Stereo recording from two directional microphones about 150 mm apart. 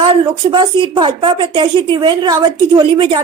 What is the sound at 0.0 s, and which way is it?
Speech, 30° right (ahead or behind).